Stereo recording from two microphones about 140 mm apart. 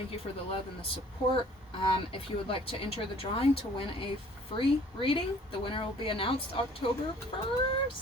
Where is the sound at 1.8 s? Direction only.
40° left (ahead or behind).